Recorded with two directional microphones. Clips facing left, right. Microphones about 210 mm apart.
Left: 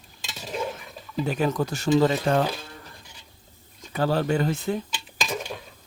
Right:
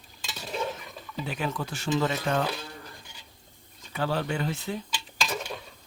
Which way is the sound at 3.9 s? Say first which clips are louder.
Left 6 dB; 40° left (ahead or behind).